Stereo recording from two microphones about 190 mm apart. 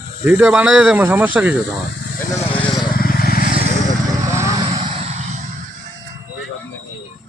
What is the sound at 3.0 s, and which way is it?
Vehicle, 50° left (ahead or behind).